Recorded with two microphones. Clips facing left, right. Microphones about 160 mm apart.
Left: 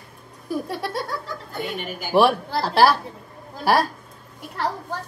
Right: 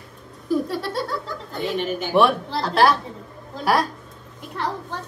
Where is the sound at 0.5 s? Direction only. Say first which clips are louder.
Right 5 dB; centre (ahead or behind).